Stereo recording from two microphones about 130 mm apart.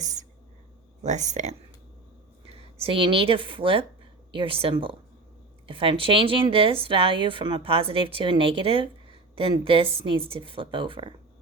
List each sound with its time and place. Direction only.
0.0 s a sound: 70° right (ahead or behind)
1.0 s speech: 70° right (ahead or behind)
2.7 s a woman's voice: 45° right (ahead or behind)